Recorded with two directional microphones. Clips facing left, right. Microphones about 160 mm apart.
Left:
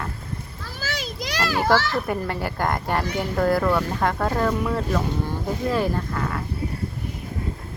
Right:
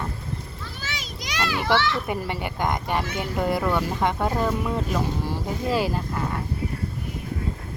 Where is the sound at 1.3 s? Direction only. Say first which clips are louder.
Left 2 dB; 45° left (ahead or behind).